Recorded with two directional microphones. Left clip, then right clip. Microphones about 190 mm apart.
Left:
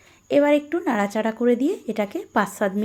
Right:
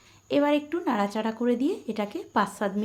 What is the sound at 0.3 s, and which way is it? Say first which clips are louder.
A woman's voice: left 6 dB; 25° left (ahead or behind).